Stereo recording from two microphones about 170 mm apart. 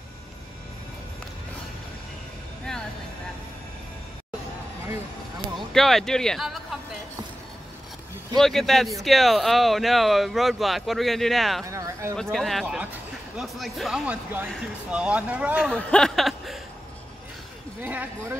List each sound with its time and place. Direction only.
5.7 s speech: centre (ahead or behind)
8.4 s speech: centre (ahead or behind)
11.6 s a sound: 20° right (ahead or behind)
12.2 s speech: centre (ahead or behind)
15.5 s speech: 5° left (ahead or behind)
17.8 s speech: 10° right (ahead or behind)